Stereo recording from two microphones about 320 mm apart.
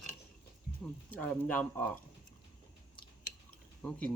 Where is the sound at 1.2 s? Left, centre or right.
Centre.